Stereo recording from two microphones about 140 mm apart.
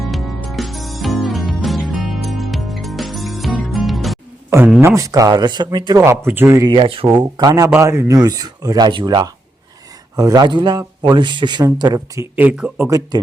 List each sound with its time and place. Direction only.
0.0 s music: centre (ahead or behind)
4.4 s a sound: 15° right (ahead or behind)
4.8 s speech: 20° right (ahead or behind)
6.1 s speech: 15° right (ahead or behind)
6.7 s speech: 40° right (ahead or behind)
7.2 s speech: 30° right (ahead or behind)
12.4 s speech: 10° right (ahead or behind)